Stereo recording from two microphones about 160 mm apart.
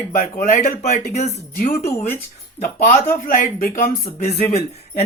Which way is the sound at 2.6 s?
50° left (ahead or behind).